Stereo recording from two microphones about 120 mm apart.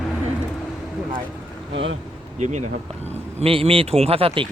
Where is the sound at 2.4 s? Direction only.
75° right (ahead or behind); by 4.4 s 55° right (ahead or behind).